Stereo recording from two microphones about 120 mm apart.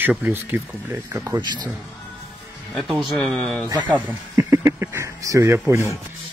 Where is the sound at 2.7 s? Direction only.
Centre (ahead or behind).